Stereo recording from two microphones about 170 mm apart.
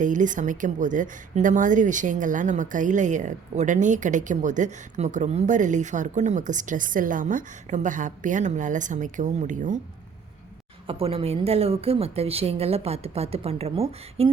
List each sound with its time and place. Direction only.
0.0 s a woman's voice: 50° right (ahead or behind)
10.8 s a woman's voice: 35° right (ahead or behind)